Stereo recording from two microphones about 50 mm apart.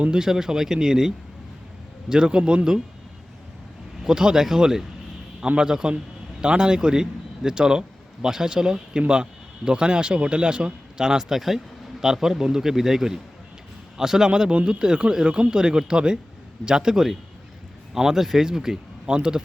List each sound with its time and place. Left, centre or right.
0.0 s a man's voice: centre
4.0 s a man's voice: centre